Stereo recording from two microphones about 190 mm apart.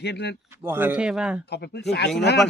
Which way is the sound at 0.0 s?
60° left (ahead or behind).